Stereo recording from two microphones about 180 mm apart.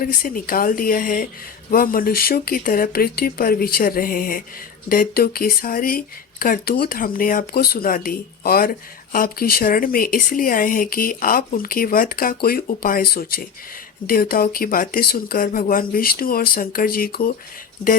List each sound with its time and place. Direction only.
0.0 s speech: 55° left (ahead or behind)